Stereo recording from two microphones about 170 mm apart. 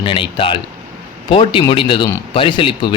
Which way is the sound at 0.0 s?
30° left (ahead or behind).